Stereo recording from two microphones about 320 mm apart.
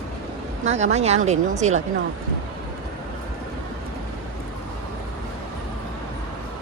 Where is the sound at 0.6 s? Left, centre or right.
Right.